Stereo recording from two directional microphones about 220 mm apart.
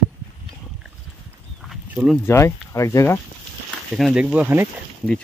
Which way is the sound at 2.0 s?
10° left (ahead or behind).